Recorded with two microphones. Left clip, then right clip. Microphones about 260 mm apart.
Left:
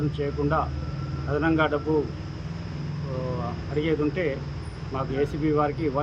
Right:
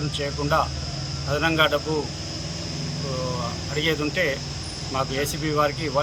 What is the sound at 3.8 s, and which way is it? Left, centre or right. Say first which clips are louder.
Speech: right 2 dB; centre.